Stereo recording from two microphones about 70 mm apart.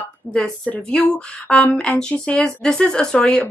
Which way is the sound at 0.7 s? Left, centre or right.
Left.